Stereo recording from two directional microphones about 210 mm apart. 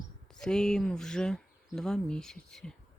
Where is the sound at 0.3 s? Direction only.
5° left (ahead or behind).